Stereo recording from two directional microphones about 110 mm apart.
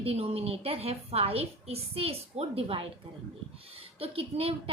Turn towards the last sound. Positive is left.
turn(degrees=-60)  # may be behind; listen again after turning